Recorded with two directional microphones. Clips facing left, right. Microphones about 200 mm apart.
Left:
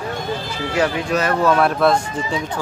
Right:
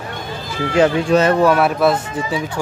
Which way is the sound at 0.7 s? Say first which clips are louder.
Right 6 dB; 25° right (ahead or behind).